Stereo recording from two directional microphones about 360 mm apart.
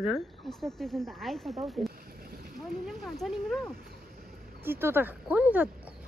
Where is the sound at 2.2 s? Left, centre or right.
Right.